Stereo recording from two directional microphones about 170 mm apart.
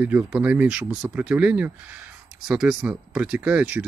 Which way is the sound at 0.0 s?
10° right (ahead or behind).